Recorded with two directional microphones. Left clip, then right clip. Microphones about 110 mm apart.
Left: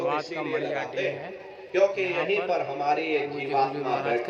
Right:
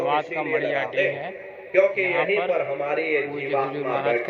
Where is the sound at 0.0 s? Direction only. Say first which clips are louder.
Right 5 dB; 15° left (ahead or behind).